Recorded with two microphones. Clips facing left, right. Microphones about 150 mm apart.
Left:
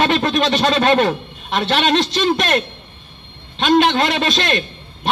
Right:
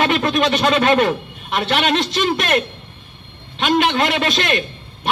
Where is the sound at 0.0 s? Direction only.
25° left (ahead or behind).